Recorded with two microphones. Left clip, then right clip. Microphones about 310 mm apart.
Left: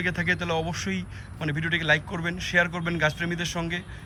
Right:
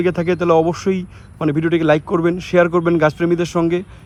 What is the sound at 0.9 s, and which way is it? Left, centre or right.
Speech, right.